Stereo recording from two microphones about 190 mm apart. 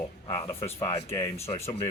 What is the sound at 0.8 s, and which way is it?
Speech, 30° left (ahead or behind).